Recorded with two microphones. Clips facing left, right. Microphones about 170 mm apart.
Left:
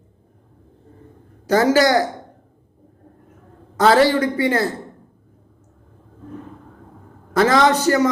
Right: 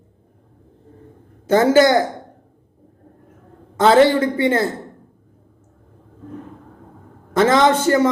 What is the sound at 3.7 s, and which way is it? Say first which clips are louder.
A man's voice: right 2 dB; 25° right (ahead or behind).